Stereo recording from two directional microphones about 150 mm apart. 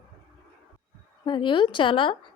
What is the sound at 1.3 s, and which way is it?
Speech, 30° left (ahead or behind).